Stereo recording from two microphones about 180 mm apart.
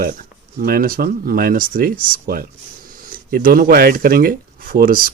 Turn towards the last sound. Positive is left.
turn(degrees=-55)  # may be behind; listen again after turning